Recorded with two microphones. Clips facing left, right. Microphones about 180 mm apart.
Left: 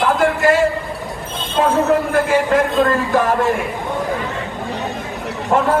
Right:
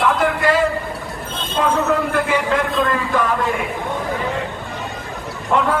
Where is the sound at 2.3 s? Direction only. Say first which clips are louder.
Left 4 dB; 45° left (ahead or behind).